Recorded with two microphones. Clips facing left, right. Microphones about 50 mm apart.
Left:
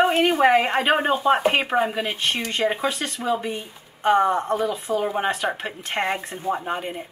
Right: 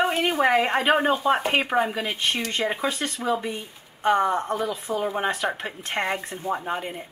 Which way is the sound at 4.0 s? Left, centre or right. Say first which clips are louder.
Left 2 dB; centre.